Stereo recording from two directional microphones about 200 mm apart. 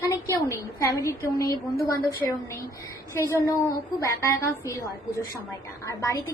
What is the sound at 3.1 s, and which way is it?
A woman's voice, 15° left (ahead or behind).